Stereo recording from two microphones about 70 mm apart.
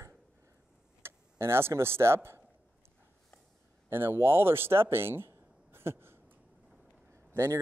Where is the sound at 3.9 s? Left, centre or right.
Right.